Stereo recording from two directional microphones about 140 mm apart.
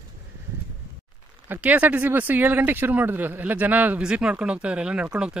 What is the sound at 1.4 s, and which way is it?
Speech, 10° right (ahead or behind).